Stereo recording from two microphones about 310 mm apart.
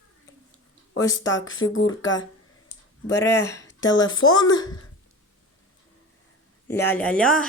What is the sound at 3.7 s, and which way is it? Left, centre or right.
Speech, left.